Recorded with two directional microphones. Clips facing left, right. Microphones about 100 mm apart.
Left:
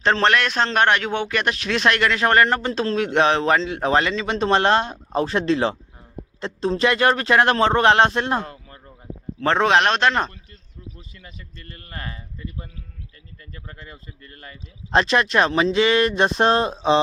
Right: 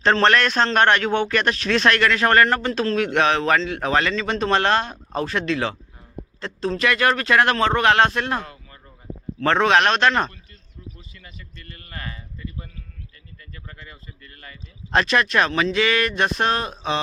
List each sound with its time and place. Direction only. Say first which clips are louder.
0.0 s a man's voice: right 1 dB; 15° left (ahead or behind)